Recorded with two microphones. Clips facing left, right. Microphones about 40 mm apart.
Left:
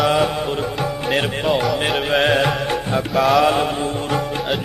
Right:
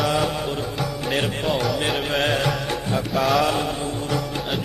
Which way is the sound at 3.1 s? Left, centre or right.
Centre.